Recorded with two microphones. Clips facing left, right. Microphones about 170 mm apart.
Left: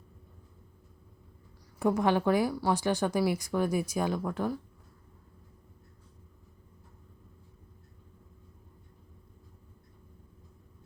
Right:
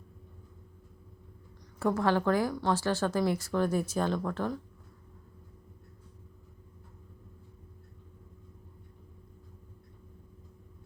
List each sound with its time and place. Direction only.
1.8 s speech: 15° left (ahead or behind)